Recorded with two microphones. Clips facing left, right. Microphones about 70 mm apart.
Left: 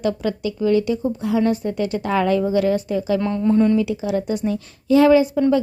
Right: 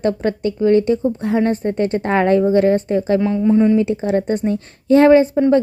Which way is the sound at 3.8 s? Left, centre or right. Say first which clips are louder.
Right 4 dB; right.